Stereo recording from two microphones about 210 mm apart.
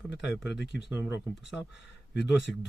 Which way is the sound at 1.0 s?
10° right (ahead or behind).